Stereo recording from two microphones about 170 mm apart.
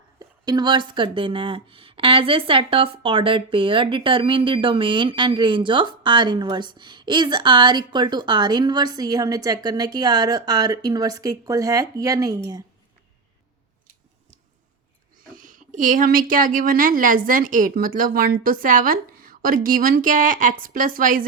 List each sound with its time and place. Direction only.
0.2 s speech: 25° right (ahead or behind)
15.3 s speech: 50° right (ahead or behind)